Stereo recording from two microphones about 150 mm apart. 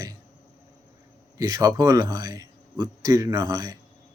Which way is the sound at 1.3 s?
25° right (ahead or behind).